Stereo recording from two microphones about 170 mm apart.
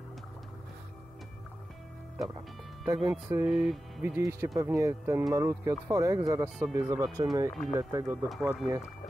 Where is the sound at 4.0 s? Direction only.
15° right (ahead or behind).